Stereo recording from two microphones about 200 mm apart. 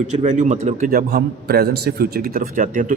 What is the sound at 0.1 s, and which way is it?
Speech, 35° right (ahead or behind).